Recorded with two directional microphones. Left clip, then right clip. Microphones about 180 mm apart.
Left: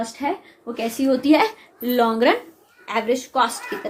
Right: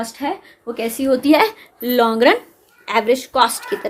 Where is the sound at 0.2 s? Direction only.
50° right (ahead or behind).